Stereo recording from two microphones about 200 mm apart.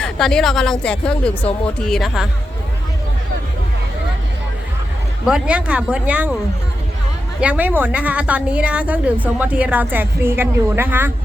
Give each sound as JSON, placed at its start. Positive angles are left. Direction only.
{"t": 0.0, "sound": "a woman's voice", "side_deg": 5}
{"t": 5.2, "sound": "a woman's voice", "side_deg": -5}
{"t": 7.4, "sound": "a woman's voice", "side_deg": -10}